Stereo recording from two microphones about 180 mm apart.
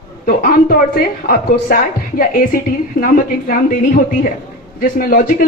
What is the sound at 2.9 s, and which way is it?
Speech, 50° left (ahead or behind).